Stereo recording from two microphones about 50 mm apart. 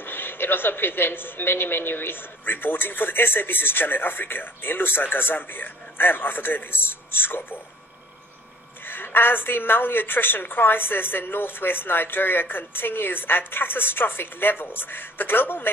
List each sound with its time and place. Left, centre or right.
0.0 s a woman's voice: left
8.8 s a woman's voice: left